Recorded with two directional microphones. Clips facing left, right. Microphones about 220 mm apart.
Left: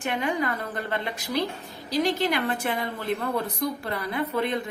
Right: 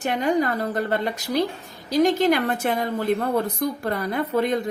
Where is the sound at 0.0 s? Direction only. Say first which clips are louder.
Right 5 dB; 40° right (ahead or behind).